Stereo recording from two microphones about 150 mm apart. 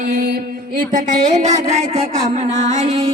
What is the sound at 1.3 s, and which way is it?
Music, 50° right (ahead or behind).